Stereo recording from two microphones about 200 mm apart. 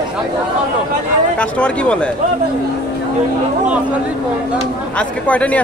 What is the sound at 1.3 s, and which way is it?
Speech, 5° left (ahead or behind).